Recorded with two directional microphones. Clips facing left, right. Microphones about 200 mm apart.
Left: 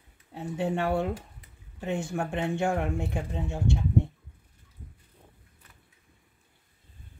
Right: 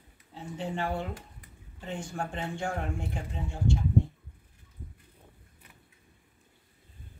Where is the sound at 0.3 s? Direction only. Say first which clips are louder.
Left 6 dB; 65° left (ahead or behind).